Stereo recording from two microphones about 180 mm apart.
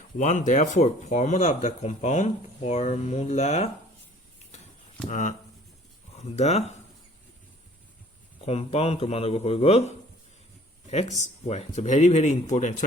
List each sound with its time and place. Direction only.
0.2 s speech: 40° left (ahead or behind)
5.0 s speech: 45° left (ahead or behind)
8.4 s speech: 35° left (ahead or behind)
11.4 s speech: 35° left (ahead or behind)